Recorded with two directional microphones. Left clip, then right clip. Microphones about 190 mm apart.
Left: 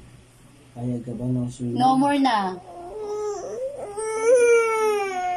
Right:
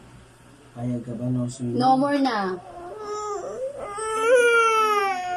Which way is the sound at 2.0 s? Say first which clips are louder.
Left 2 dB; 40° left (ahead or behind).